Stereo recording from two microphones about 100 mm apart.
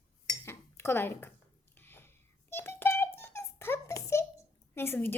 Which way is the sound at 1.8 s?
20° left (ahead or behind).